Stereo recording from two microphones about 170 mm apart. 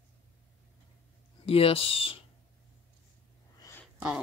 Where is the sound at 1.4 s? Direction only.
35° left (ahead or behind).